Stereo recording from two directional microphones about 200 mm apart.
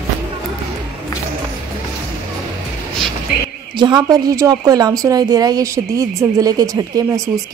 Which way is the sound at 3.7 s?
20° right (ahead or behind).